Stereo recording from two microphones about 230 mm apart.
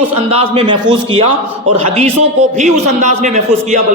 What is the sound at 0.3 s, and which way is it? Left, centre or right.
A man's voice, right.